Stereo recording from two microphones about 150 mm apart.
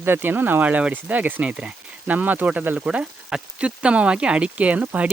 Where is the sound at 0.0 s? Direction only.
15° right (ahead or behind).